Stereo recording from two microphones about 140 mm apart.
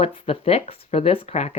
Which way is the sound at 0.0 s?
45° left (ahead or behind).